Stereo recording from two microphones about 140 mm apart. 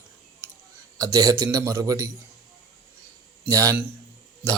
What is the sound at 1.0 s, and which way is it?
Speech, 25° right (ahead or behind).